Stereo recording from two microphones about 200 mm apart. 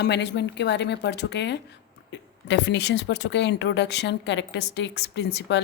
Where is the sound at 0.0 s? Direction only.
60° left (ahead or behind).